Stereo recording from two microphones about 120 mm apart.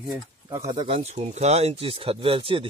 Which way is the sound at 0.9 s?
70° right (ahead or behind).